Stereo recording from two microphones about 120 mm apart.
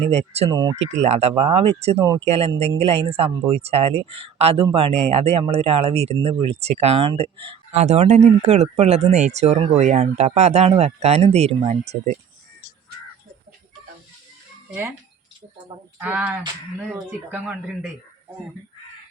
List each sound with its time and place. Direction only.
0.0 s speech: 60° right (ahead or behind)
0.5 s speech: 35° right (ahead or behind)
1.0 s speech: 60° right (ahead or behind)
7.7 s speech: 75° right (ahead or behind)
14.7 s speech: 15° right (ahead or behind)
16.0 s speech: 10° right (ahead or behind)